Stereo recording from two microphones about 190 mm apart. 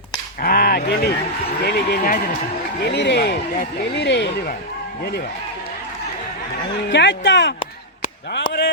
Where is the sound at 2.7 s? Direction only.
60° left (ahead or behind).